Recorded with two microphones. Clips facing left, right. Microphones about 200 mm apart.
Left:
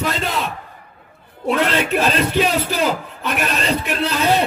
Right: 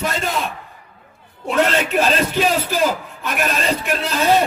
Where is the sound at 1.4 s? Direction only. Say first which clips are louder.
Even; 45° right (ahead or behind).